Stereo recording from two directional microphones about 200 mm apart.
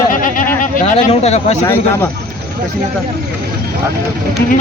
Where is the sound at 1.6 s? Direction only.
10° left (ahead or behind).